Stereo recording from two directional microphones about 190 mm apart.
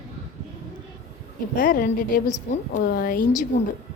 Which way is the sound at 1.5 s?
45° left (ahead or behind).